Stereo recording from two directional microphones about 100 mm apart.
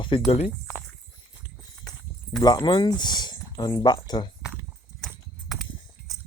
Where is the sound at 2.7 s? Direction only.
50° left (ahead or behind).